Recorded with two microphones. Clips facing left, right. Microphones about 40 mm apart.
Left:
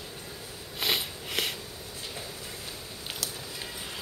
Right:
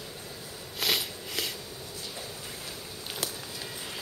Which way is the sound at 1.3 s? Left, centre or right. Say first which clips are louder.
Left 4 dB; left.